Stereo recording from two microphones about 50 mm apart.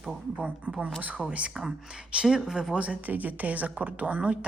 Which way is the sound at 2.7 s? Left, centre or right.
Right.